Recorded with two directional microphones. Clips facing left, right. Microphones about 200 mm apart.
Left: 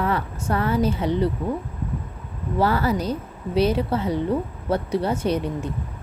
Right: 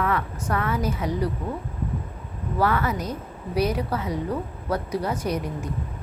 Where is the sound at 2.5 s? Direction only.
30° left (ahead or behind).